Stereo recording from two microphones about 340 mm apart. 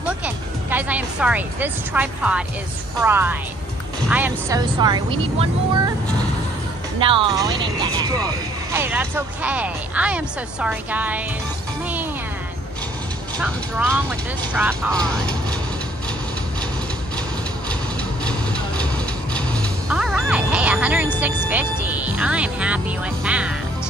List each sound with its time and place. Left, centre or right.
0.2 s a woman's voice: centre
7.0 s speech: centre
13.4 s speech: centre
18.2 s vehicle: centre
19.9 s music: centre
21.5 s speech: centre